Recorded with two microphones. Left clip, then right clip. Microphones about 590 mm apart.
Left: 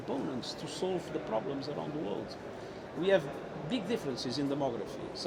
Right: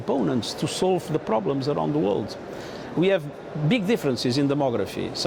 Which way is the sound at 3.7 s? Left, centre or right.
Right.